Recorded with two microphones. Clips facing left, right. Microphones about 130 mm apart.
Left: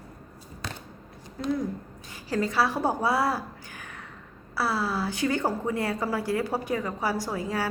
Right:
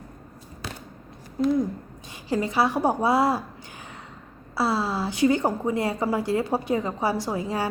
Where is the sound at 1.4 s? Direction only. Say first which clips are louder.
Right 6 dB; 20° right (ahead or behind).